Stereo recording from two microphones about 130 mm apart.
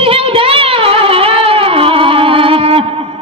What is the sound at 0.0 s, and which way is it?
Child singing, 45° right (ahead or behind).